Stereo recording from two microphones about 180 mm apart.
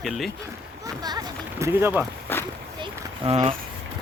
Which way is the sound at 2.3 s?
10° left (ahead or behind).